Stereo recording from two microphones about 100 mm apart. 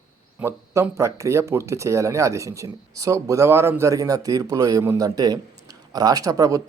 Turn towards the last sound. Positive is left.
turn(degrees=-35)  # may be behind; listen again after turning